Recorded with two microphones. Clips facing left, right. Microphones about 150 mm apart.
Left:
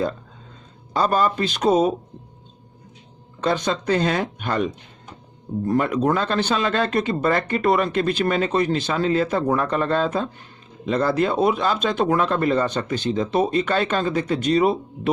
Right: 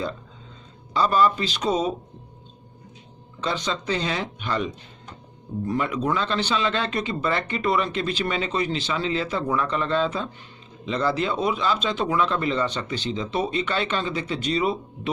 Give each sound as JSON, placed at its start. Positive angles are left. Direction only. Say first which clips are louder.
{"t": 0.9, "sound": "speech", "louder": "left 1 dB", "side_deg": 50}
{"t": 3.4, "sound": "speech", "louder": "left 5 dB", "side_deg": 50}